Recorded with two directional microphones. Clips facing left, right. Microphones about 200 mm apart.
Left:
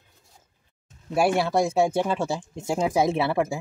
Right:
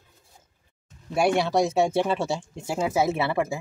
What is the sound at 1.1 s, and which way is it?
Speech, 5° left (ahead or behind).